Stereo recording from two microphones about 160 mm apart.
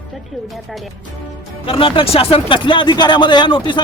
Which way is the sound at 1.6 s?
35° left (ahead or behind).